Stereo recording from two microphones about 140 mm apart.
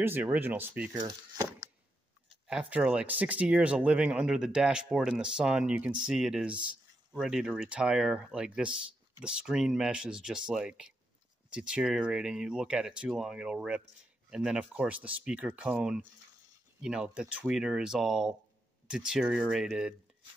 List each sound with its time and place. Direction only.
0.0 s speech: 15° right (ahead or behind)
0.9 s speech: 30° right (ahead or behind)
2.7 s speech: 10° right (ahead or behind)